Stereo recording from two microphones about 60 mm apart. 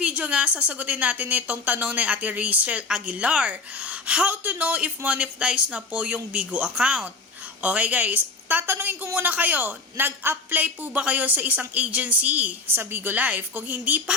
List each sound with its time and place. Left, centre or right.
0.0 s a woman's voice: right